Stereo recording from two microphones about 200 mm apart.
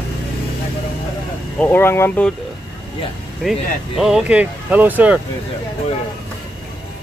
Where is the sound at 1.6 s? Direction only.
10° left (ahead or behind).